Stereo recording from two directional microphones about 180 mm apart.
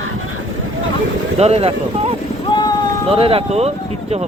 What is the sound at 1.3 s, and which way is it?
Speech, 35° right (ahead or behind).